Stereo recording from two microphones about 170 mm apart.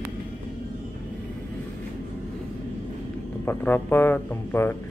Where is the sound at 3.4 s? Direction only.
10° left (ahead or behind).